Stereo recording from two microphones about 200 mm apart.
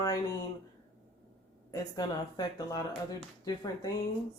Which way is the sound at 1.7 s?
20° left (ahead or behind).